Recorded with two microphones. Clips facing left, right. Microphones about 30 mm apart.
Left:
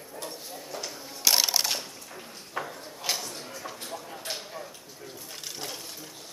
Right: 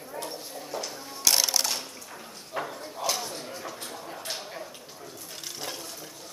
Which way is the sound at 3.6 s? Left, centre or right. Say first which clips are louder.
Even; centre.